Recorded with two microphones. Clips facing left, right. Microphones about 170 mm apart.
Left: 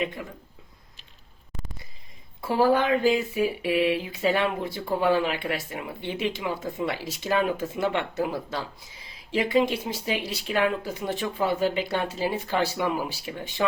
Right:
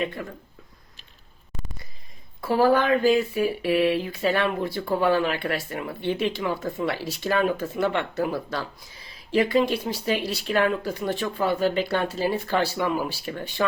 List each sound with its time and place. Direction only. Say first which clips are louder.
0.0 s speech: right 1 dB; 15° left (ahead or behind)
2.6 s speech: right 2 dB; 20° left (ahead or behind)